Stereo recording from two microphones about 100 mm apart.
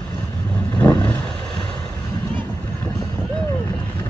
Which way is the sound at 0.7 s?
15° left (ahead or behind).